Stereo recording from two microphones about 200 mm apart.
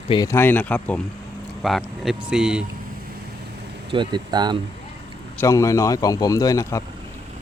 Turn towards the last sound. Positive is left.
turn(degrees=15)  # may be behind; listen again after turning